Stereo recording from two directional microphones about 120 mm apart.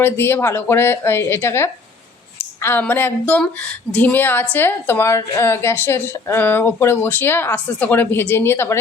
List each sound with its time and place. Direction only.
0.0 s a woman's voice: 20° left (ahead or behind)